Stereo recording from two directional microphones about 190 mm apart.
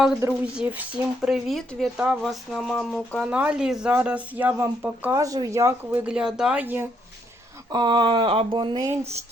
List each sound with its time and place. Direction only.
0.2 s speech: 5° right (ahead or behind)
7.7 s speech: 25° right (ahead or behind)